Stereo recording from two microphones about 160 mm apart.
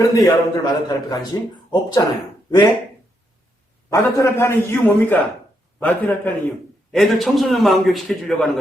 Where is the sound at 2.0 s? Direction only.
25° left (ahead or behind).